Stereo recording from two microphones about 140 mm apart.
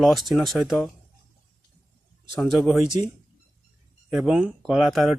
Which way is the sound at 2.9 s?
30° right (ahead or behind).